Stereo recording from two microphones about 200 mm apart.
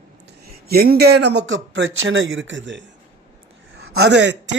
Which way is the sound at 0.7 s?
50° right (ahead or behind).